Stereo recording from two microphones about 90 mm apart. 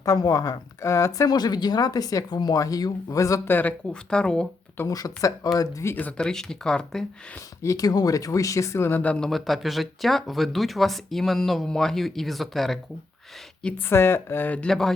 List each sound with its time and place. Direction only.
0.0 s speech: 40° left (ahead or behind)
1.4 s speech: 50° left (ahead or behind)
3.5 s speech: 20° left (ahead or behind)
4.9 s speech: 40° left (ahead or behind)
5.9 s speech: 15° left (ahead or behind)
7.3 s speech: 35° left (ahead or behind); by 9.3 s 15° left (ahead or behind)
9.3 s speech: centre (ahead or behind)
13.8 s speech: 25° left (ahead or behind)
14.7 s speech: 5° left (ahead or behind)